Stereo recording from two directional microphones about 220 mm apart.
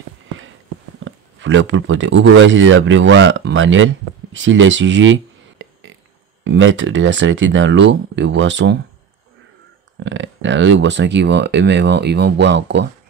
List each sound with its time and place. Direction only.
1.0 s speech: 55° right (ahead or behind)
9.9 s speech: 55° right (ahead or behind)